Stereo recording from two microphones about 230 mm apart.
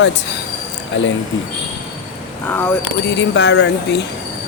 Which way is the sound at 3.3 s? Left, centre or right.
Left.